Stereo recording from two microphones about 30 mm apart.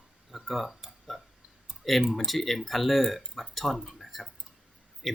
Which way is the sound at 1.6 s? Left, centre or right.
Centre.